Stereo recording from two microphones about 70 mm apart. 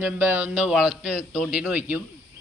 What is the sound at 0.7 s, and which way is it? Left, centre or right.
Speech, centre.